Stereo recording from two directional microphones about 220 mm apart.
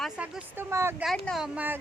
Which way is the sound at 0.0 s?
5° right (ahead or behind).